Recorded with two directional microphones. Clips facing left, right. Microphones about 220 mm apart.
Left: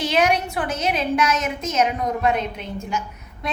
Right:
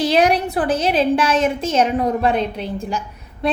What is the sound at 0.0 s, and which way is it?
A woman's voice, 35° right (ahead or behind).